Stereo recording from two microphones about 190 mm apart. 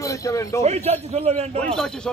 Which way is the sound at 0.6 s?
35° right (ahead or behind).